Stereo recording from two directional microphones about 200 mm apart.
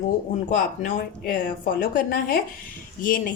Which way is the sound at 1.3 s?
45° left (ahead or behind).